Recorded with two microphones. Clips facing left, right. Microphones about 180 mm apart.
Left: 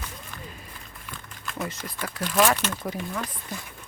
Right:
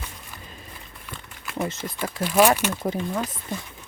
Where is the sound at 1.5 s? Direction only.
25° right (ahead or behind).